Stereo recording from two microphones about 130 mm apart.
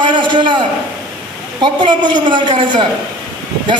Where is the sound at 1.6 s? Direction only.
35° right (ahead or behind).